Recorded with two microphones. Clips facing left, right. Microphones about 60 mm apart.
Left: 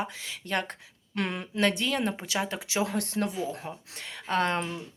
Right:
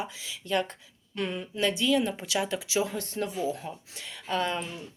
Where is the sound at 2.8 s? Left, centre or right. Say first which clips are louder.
Left 3 dB; left.